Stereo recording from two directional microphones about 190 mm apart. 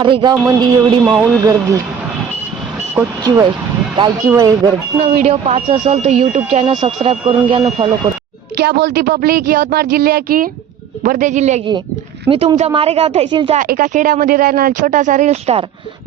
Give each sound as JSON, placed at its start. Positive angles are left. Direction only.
{"t": 0.0, "sound": "speech", "side_deg": -25}
{"t": 0.4, "sound": "speech", "side_deg": -15}
{"t": 2.9, "sound": "speech", "side_deg": -15}
{"t": 5.0, "sound": "speech", "side_deg": -35}
{"t": 8.5, "sound": "speech", "side_deg": -60}
{"t": 13.6, "sound": "speech", "side_deg": -45}